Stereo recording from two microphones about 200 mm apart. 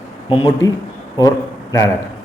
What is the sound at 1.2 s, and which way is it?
Speech, 15° left (ahead or behind).